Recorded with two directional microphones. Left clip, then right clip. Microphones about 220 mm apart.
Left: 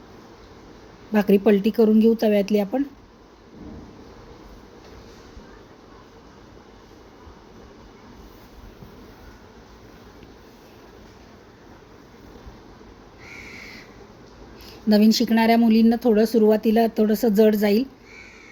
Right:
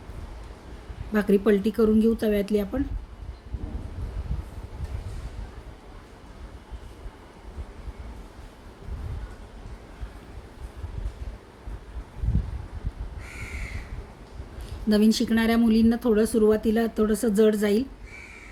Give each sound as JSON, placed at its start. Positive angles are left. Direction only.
{"t": 1.1, "sound": "speech", "side_deg": -5}
{"t": 14.8, "sound": "speech", "side_deg": -10}